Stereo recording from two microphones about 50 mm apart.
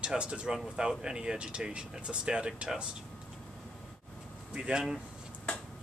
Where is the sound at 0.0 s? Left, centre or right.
Centre.